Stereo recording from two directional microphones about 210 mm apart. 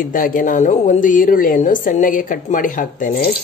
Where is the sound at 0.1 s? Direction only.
40° left (ahead or behind).